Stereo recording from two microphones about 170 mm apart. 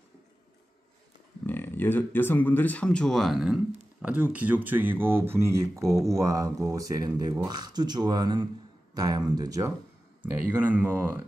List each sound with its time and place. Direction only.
1.4 s speech: 10° left (ahead or behind); by 9.7 s 20° right (ahead or behind)
10.5 s speech: 10° right (ahead or behind)